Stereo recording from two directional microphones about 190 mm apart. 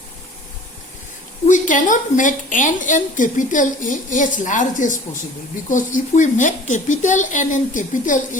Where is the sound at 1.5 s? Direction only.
40° left (ahead or behind).